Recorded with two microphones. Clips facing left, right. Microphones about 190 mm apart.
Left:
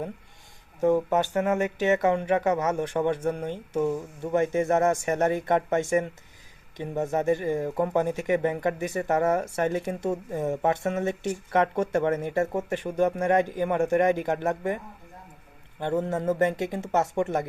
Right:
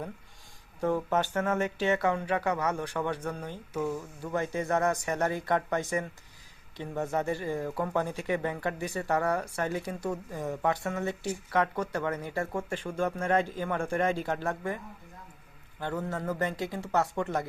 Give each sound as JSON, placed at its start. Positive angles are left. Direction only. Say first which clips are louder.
{"t": 0.8, "sound": "speech", "louder": "left 6 dB", "side_deg": 15}
{"t": 15.8, "sound": "speech", "louder": "left 7 dB", "side_deg": 25}